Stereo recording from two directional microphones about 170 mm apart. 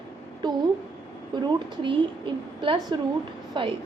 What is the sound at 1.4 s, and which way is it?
A woman's voice, 30° right (ahead or behind).